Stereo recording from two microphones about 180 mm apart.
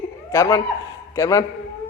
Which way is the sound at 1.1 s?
15° left (ahead or behind).